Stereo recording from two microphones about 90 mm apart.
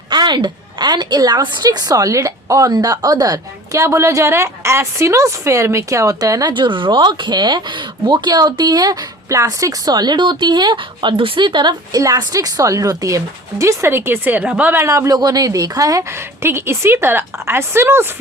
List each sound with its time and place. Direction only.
0.1 s a woman's voice: 55° right (ahead or behind)
6.5 s speech: 65° right (ahead or behind)
11.9 s a woman's voice: 40° right (ahead or behind); by 14.7 s 15° right (ahead or behind)
14.7 s speech: 30° right (ahead or behind)